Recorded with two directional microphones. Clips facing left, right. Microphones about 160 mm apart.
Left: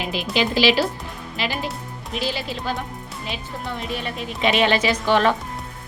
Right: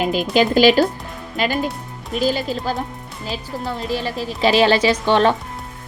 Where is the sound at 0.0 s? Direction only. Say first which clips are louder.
Right 6 dB; 45° right (ahead or behind).